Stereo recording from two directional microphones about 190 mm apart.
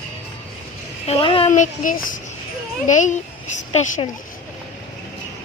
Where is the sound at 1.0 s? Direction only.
30° left (ahead or behind).